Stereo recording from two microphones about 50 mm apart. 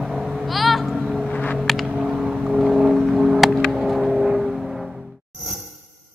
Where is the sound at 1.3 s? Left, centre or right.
Left.